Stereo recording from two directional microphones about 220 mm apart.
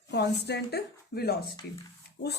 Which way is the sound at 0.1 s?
50° left (ahead or behind).